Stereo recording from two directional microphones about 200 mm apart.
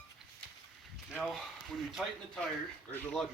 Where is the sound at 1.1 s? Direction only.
Centre (ahead or behind).